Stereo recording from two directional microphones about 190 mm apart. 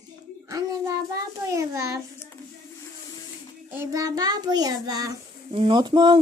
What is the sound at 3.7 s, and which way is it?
Child singing, 15° right (ahead or behind).